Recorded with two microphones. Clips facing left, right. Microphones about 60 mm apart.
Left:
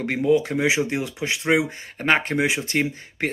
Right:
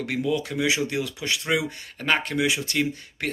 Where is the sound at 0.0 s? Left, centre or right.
Left.